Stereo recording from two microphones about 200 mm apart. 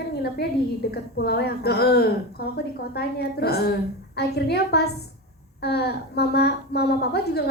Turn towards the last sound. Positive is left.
turn(degrees=55)  # may be behind; listen again after turning